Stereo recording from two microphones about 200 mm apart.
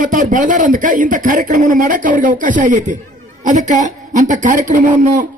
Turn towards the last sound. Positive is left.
turn(degrees=-40)  # may be behind; listen again after turning